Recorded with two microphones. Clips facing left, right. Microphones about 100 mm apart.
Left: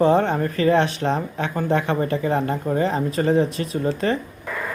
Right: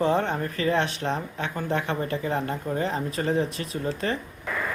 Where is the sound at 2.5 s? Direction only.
50° left (ahead or behind).